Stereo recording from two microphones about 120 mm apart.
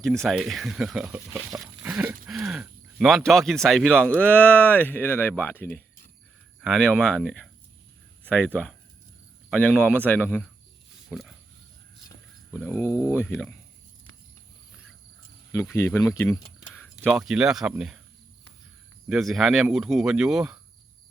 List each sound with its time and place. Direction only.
0.0 s speech: 5° left (ahead or behind)
2.0 s a sound: 15° right (ahead or behind)
2.3 s speech: 5° right (ahead or behind); by 8.4 s 10° left (ahead or behind)
9.6 s speech: 15° left (ahead or behind)
11.1 s speech: centre (ahead or behind)
12.6 s speech: 20° left (ahead or behind)
15.7 s speech: 20° left (ahead or behind)
16.0 s a sound: 20° left (ahead or behind)
17.0 s speech: centre (ahead or behind)
19.0 s speech: centre (ahead or behind)